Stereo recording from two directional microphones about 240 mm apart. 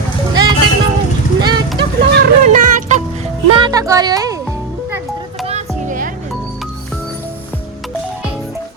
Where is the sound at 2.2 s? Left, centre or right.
Right.